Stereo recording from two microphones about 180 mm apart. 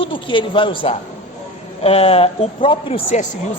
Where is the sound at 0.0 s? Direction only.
30° left (ahead or behind).